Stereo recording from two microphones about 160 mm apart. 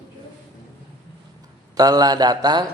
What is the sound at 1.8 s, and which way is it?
Mantra, 25° right (ahead or behind).